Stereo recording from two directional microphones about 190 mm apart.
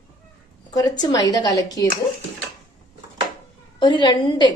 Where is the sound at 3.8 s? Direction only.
25° left (ahead or behind).